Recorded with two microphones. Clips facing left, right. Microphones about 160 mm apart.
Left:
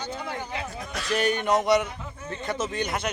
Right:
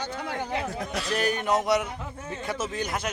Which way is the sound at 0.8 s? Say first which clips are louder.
Right 4 dB; 25° right (ahead or behind).